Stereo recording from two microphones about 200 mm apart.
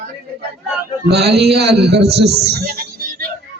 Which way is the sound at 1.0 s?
55° right (ahead or behind).